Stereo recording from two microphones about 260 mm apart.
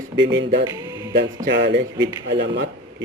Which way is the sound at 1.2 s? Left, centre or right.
Right.